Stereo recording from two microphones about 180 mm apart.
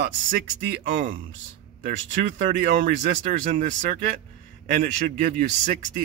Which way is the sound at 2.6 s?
45° right (ahead or behind).